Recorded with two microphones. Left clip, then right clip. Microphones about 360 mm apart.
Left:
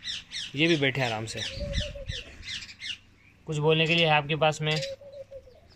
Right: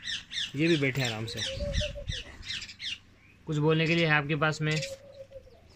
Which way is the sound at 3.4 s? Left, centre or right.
Centre.